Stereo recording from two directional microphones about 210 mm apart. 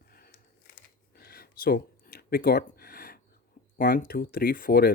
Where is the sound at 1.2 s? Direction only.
45° left (ahead or behind).